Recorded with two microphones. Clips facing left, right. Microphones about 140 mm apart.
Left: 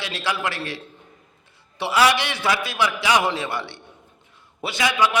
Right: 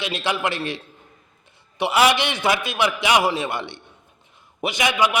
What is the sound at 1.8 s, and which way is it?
A man's voice, 20° right (ahead or behind).